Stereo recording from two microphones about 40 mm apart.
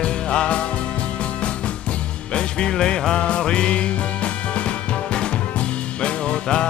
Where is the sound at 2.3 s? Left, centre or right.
Left.